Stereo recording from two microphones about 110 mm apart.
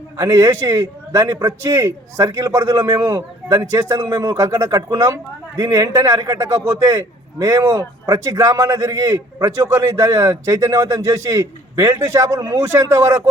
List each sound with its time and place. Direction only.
0.2 s a man's voice: 30° right (ahead or behind)